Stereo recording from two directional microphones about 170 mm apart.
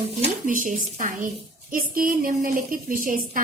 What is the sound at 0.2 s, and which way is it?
A woman's voice, 50° right (ahead or behind).